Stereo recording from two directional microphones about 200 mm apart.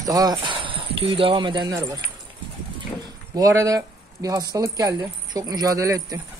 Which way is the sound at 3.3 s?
15° right (ahead or behind).